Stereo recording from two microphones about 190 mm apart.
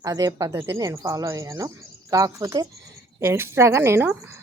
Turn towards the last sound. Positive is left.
turn(degrees=-10)  # may be behind; listen again after turning